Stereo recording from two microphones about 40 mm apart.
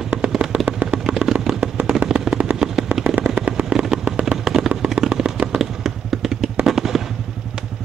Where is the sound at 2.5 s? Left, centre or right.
Centre.